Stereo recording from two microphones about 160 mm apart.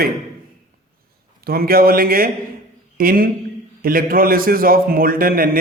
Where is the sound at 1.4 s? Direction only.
70° right (ahead or behind).